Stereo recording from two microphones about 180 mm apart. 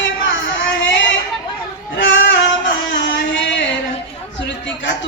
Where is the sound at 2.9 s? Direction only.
80° left.